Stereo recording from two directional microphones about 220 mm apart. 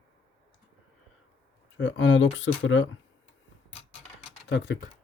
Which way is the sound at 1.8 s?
60° left (ahead or behind).